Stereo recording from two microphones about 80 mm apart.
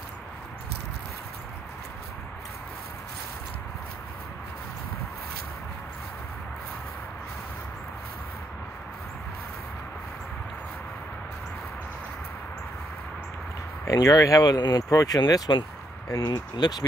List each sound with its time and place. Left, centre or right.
13.8 s speech: left
15.1 s speech: left